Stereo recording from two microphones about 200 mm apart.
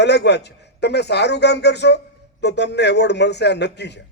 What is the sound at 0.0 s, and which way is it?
A man's voice, 55° left (ahead or behind).